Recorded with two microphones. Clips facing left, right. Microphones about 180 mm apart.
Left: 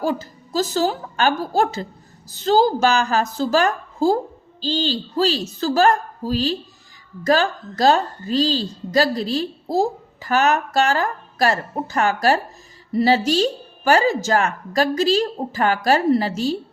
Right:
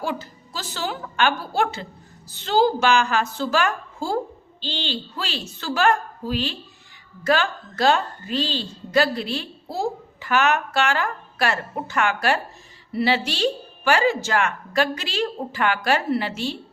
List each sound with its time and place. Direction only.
0.0 s a woman's voice: 40° left (ahead or behind)